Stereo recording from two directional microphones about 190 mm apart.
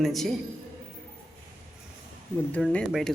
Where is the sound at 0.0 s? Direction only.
Centre (ahead or behind).